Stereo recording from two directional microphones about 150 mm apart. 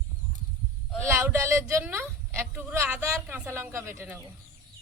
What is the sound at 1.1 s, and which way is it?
Speech, 15° right (ahead or behind).